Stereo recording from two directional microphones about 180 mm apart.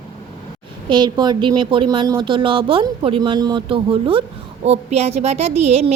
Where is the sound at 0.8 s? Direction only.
25° right (ahead or behind).